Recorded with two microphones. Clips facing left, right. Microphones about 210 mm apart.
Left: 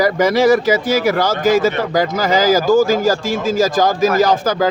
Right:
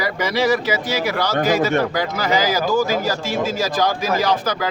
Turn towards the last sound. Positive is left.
turn(degrees=45)  # may be behind; listen again after turning